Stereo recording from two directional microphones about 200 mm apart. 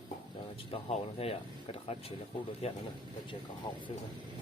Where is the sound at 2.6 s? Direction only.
30° left (ahead or behind).